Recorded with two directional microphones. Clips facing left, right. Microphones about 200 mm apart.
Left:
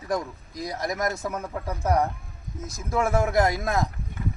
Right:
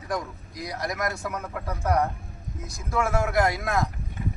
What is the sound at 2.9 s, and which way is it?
Speech, 20° left (ahead or behind).